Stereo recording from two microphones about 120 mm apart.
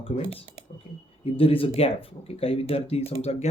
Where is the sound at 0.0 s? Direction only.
50° left (ahead or behind).